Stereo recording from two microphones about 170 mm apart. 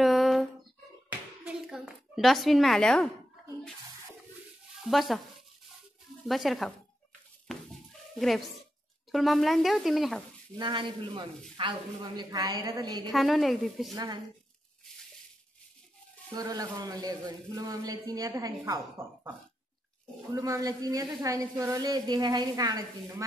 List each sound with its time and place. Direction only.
0.0 s a sound: centre (ahead or behind)
4.8 s speech: centre (ahead or behind)
6.2 s speech: centre (ahead or behind)
9.1 s speech: centre (ahead or behind)
10.6 s a man's voice: 30° right (ahead or behind)
13.1 s speech: centre (ahead or behind)
13.9 s a man's voice: 25° right (ahead or behind)
16.3 s a man's voice: 20° right (ahead or behind)
20.3 s a man's voice: 20° right (ahead or behind)